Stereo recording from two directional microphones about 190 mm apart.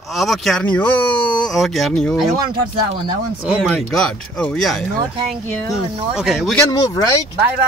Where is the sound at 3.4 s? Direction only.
5° right (ahead or behind).